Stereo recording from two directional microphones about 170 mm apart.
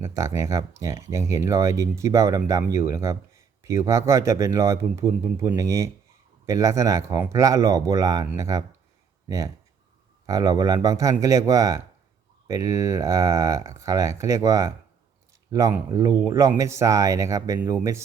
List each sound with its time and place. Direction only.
0.0 s speech: 15° right (ahead or behind)
10.2 s speech: 20° right (ahead or behind)